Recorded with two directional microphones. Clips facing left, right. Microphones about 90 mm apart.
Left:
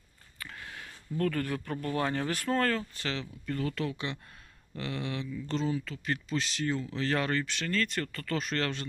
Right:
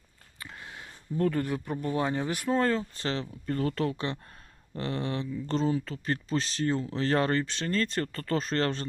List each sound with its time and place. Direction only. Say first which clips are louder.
0.3 s speech: even; 20° right (ahead or behind)